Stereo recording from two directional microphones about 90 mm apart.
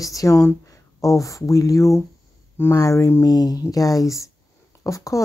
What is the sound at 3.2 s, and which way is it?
Speech, 45° left (ahead or behind).